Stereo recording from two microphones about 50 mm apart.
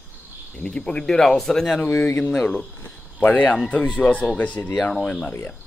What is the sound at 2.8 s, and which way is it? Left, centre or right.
Speech, left.